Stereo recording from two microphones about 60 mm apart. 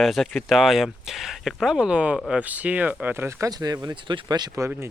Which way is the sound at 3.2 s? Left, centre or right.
Right.